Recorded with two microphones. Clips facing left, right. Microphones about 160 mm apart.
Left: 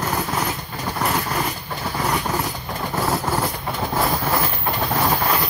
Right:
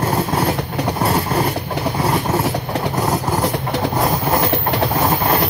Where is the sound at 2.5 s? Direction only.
70° right (ahead or behind).